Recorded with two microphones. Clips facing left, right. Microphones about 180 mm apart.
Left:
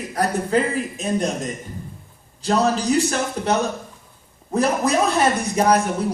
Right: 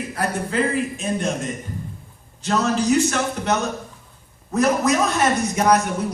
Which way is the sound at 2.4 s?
35° left (ahead or behind).